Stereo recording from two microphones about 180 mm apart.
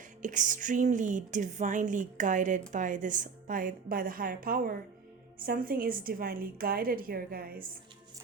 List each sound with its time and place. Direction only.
0.2 s a woman's voice: 45° right (ahead or behind)